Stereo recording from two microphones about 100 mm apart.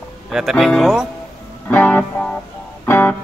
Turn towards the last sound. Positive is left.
turn(degrees=20)  # may be behind; listen again after turning